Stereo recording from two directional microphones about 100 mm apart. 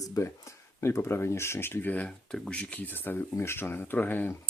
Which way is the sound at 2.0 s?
5° left (ahead or behind).